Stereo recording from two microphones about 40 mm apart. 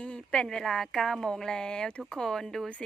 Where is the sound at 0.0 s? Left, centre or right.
Left.